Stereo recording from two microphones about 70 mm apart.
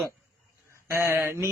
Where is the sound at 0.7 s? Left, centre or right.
Right.